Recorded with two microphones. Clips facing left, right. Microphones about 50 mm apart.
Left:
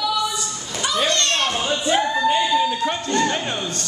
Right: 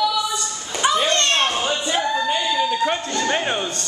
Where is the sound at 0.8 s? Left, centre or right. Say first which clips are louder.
Right 3 dB; right.